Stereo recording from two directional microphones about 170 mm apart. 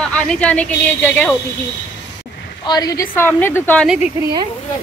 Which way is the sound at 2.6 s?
20° left (ahead or behind).